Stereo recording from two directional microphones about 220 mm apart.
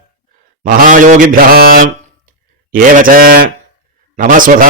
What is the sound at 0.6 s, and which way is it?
Mantra, 40° right (ahead or behind).